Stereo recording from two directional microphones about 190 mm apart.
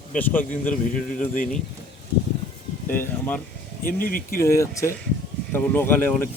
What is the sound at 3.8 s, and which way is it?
Speech, 50° left (ahead or behind).